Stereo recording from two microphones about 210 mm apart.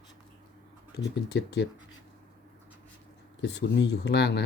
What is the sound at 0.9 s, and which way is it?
Speech, 55° left (ahead or behind).